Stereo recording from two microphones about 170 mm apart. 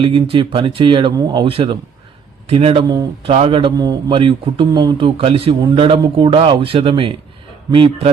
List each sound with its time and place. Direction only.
0.0 s speech: 30° right (ahead or behind)
2.9 s speech: 25° right (ahead or behind)